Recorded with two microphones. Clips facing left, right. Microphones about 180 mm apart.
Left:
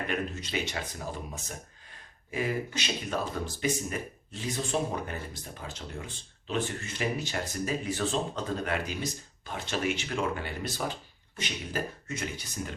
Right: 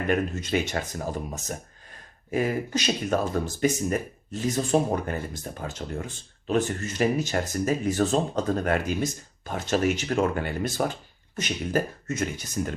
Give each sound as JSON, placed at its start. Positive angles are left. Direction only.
{"t": 0.1, "sound": "speech", "side_deg": -50}